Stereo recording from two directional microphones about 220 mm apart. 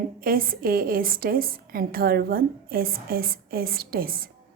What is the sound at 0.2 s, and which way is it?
A woman's voice, 40° right (ahead or behind).